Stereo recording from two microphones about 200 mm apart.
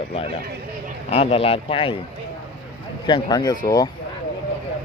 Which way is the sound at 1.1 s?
30° left (ahead or behind).